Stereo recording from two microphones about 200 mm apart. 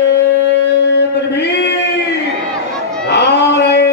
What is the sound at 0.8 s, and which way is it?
Singing, 55° left (ahead or behind).